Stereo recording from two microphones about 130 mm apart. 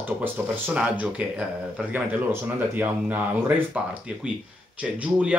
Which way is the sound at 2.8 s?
15° right (ahead or behind).